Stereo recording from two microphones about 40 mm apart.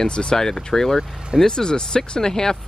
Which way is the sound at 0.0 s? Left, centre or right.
Centre.